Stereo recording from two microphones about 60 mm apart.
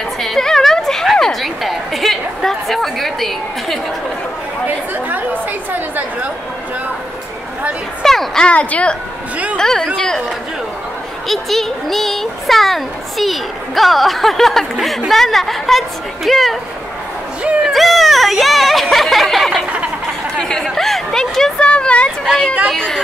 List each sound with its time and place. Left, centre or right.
0.2 s a sound: centre
4.6 s a woman's voice: right
8.0 s a child's voice: centre
8.5 s speech: left
9.6 s speech: centre
11.2 s a child's voice: centre
17.6 s a sound: centre
20.6 s speech: centre
21.6 s a sound: centre